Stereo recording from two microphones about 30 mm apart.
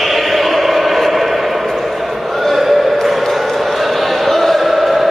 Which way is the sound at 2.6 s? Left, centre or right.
Centre.